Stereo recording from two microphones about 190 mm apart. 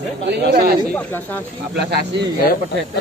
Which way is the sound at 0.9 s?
10° left (ahead or behind).